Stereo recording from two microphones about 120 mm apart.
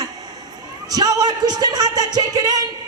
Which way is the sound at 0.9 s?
30° right (ahead or behind).